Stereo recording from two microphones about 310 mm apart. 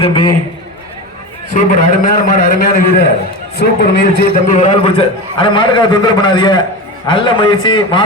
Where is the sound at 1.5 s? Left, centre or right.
Left.